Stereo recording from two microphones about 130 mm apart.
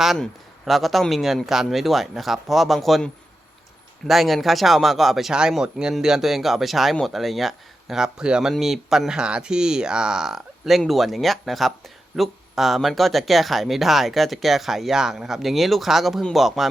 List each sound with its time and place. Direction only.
0.0 s speech: centre (ahead or behind)